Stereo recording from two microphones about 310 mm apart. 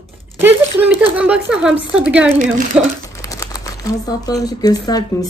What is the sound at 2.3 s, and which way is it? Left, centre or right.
Speech, right.